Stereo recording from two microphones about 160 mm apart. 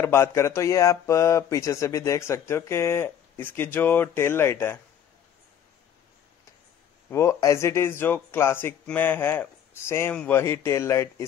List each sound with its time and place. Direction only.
0.0 s speech: 15° left (ahead or behind)
7.1 s speech: 15° left (ahead or behind)